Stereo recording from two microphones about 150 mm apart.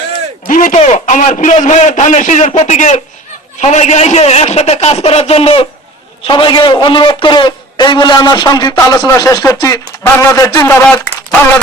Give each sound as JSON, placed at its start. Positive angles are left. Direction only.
{"t": 0.4, "sound": "a man's voice", "side_deg": 60}